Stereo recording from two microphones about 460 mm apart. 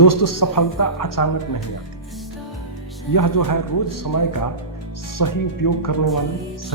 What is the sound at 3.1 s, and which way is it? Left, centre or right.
Speech, left.